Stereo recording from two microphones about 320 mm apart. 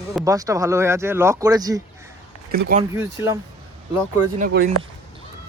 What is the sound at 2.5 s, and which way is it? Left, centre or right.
Speech, right.